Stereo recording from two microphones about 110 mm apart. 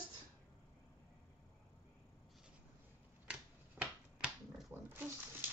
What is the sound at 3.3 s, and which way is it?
Finger snapping, 10° right (ahead or behind).